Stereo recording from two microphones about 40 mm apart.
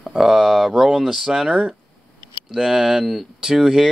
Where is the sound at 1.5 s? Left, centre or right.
Right.